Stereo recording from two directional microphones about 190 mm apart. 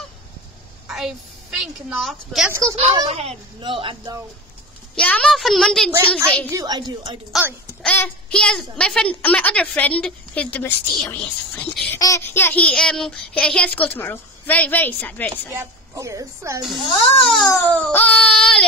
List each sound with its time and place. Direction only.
0.8 s a woman's voice: centre (ahead or behind)
2.7 s speech: 30° right (ahead or behind)
4.9 s speech: 5° left (ahead or behind)
6.5 s speech: 20° right (ahead or behind)
7.3 s speech: 10° right (ahead or behind)
7.8 s speech: 5° left (ahead or behind)
15.5 s speech: 15° right (ahead or behind)
17.4 s speech: 5° left (ahead or behind)